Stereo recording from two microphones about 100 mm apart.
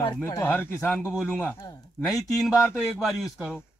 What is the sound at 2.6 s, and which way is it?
Speech, 5° right (ahead or behind).